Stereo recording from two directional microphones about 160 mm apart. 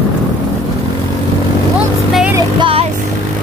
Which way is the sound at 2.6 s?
35° right (ahead or behind).